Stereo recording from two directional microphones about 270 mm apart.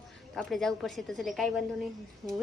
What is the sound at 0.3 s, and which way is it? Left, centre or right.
A woman's voice, centre.